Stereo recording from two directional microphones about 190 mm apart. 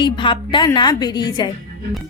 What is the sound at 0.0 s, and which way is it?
A woman's voice, 25° left (ahead or behind).